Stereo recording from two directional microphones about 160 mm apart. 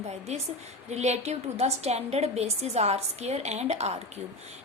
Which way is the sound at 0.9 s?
45° right (ahead or behind).